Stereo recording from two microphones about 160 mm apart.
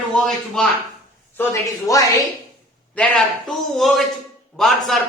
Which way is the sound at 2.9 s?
5° left (ahead or behind).